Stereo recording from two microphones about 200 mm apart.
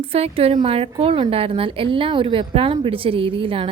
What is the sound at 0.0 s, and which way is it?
A woman's voice, 30° right (ahead or behind).